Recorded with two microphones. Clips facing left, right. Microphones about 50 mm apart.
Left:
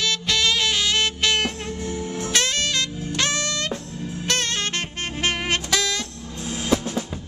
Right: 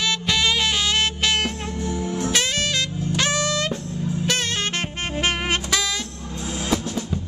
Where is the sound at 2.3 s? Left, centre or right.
Centre.